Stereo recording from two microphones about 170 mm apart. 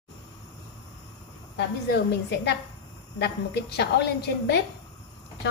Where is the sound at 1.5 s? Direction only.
75° left (ahead or behind).